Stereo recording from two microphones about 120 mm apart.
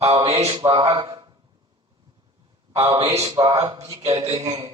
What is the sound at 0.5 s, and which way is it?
Speech, 40° right (ahead or behind).